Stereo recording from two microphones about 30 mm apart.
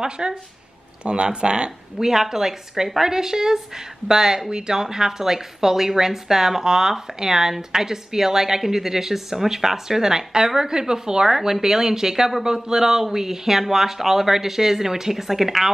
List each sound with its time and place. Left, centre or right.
0.0 s speech: right
2.0 s a woman's voice: centre